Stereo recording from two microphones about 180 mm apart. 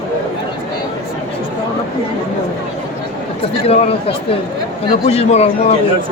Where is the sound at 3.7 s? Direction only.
35° left (ahead or behind).